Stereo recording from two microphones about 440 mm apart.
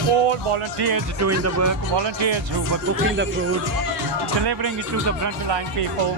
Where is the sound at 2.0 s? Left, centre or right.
Right.